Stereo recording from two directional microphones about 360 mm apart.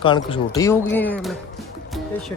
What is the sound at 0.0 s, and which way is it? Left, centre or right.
Speech, centre.